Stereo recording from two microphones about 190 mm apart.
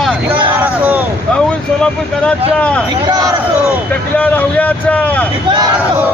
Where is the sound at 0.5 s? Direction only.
10° right (ahead or behind).